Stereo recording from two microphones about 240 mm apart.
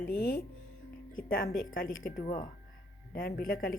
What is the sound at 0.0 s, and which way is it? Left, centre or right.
Speech, left.